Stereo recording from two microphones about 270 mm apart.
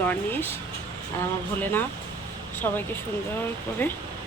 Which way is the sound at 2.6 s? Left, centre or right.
Centre.